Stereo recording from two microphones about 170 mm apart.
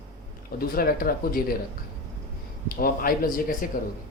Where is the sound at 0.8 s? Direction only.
60° left (ahead or behind).